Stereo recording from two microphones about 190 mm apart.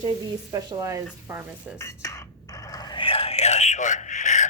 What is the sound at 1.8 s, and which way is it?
A man's voice, 15° left (ahead or behind).